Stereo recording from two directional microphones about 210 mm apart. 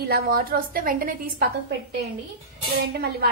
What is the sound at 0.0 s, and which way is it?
A woman's voice, 45° right (ahead or behind).